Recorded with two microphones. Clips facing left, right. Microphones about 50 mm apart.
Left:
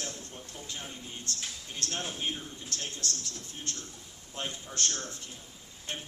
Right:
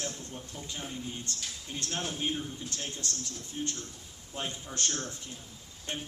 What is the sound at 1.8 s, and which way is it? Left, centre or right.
Speech, centre.